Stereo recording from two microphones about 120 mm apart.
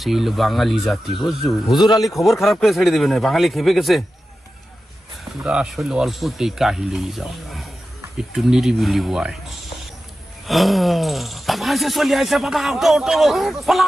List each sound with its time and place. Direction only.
0.0 s speech: centre (ahead or behind)
1.7 s speech: 35° left (ahead or behind)
2.0 s speech: centre (ahead or behind)
5.4 s speech: 5° right (ahead or behind)